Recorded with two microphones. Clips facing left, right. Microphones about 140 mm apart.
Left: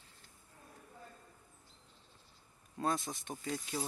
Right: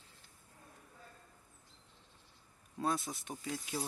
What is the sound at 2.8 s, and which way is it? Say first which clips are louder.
Speech: even; centre (ahead or behind).